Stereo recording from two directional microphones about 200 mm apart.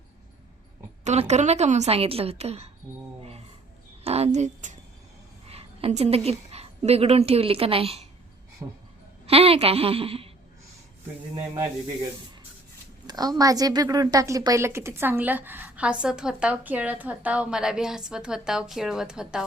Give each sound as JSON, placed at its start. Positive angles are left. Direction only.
{"t": 1.0, "sound": "a woman's voice", "side_deg": -35}
{"t": 4.0, "sound": "a woman's voice", "side_deg": -30}
{"t": 9.2, "sound": "a woman's voice", "side_deg": -30}
{"t": 13.1, "sound": "a sound", "side_deg": -20}
{"t": 13.4, "sound": "a woman's voice", "side_deg": -20}